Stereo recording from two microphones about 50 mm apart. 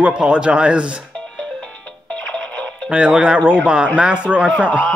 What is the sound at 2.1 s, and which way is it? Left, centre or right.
Music, left.